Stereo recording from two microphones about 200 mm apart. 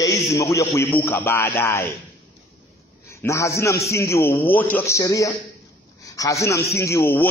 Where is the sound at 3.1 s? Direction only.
15° left (ahead or behind).